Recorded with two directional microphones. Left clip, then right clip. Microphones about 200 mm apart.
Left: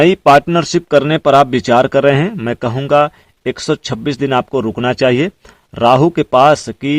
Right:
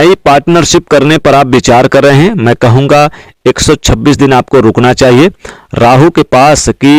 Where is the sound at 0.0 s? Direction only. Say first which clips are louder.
Right 4 dB; 40° right (ahead or behind).